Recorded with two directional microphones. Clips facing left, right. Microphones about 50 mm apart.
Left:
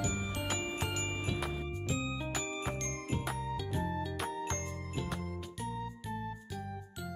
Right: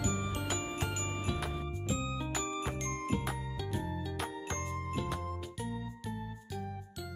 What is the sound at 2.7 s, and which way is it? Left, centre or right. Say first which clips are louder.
Jingle: right 1 dB; centre.